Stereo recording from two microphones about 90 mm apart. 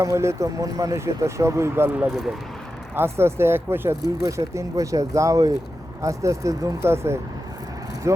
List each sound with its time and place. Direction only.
0.0 s speech: 30° right (ahead or behind)
2.0 s speech: centre (ahead or behind)
2.9 s speech: 25° right (ahead or behind)